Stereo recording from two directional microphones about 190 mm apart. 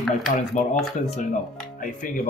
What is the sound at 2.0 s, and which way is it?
Speech, 45° left (ahead or behind).